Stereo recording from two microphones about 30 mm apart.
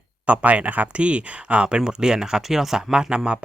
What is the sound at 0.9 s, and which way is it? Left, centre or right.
Speech, right.